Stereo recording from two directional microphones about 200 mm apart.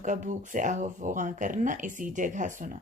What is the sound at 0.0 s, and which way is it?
Speech, 40° right (ahead or behind).